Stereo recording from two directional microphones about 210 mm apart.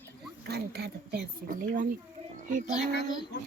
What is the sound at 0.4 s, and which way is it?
Speech, 50° right (ahead or behind).